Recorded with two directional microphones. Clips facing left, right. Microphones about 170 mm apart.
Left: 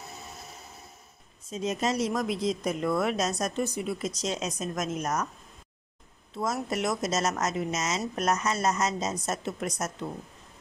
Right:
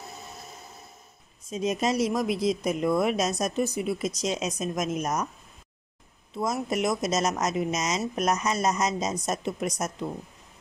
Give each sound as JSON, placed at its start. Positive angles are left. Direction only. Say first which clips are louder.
{"t": 1.5, "sound": "speech", "louder": "right 3 dB", "side_deg": -10}
{"t": 6.3, "sound": "speech", "louder": "right 2 dB", "side_deg": -10}